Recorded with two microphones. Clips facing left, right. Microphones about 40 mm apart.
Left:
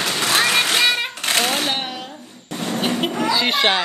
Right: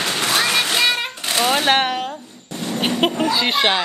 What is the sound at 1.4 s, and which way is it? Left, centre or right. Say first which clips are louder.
Speech: right 5 dB; right.